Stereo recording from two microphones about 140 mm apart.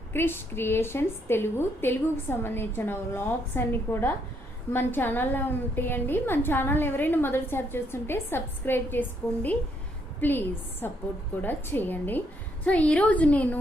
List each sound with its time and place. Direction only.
0.1 s a woman's voice: 15° left (ahead or behind)